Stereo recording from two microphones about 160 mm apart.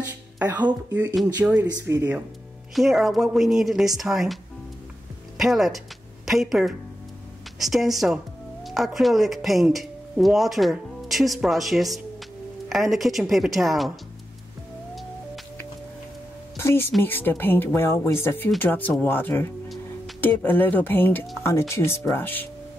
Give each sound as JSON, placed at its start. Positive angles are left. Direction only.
{"t": 0.4, "sound": "speech", "side_deg": -10}
{"t": 1.7, "sound": "speech", "side_deg": -20}
{"t": 2.7, "sound": "speech", "side_deg": 0}
{"t": 5.4, "sound": "speech", "side_deg": 0}
{"t": 16.5, "sound": "speech", "side_deg": 15}